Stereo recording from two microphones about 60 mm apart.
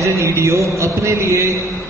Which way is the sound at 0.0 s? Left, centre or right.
Right.